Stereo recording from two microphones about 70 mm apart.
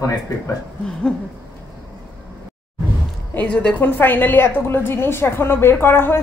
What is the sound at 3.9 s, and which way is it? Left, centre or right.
A woman's voice, left.